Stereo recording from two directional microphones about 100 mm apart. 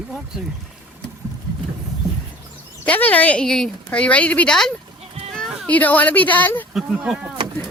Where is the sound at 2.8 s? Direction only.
15° left (ahead or behind).